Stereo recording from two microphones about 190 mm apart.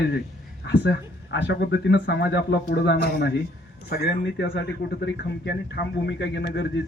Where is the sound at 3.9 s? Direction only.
60° left (ahead or behind).